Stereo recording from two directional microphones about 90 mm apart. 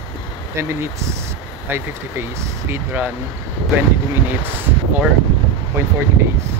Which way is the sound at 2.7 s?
20° right (ahead or behind).